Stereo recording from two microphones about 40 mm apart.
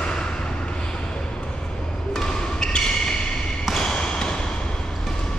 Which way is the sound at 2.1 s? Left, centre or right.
Centre.